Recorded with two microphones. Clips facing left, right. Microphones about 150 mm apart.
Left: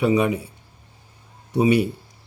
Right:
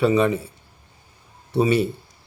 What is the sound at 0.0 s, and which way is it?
Speech, 15° left (ahead or behind).